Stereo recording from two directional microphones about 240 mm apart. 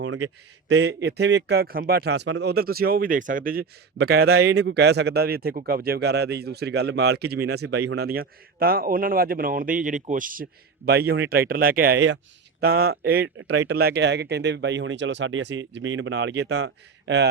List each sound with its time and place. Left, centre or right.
0.0 s speech: right
0.7 s a man's voice: right
7.7 s speech: right
7.9 s a man's voice: right